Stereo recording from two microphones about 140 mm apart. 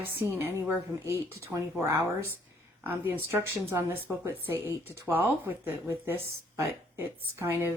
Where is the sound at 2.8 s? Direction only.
15° right (ahead or behind).